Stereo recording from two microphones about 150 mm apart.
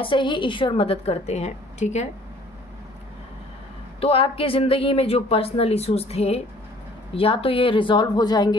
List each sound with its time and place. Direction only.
0.0 s speech: 35° left (ahead or behind); by 2.0 s 50° left (ahead or behind)
4.0 s speech: 40° left (ahead or behind)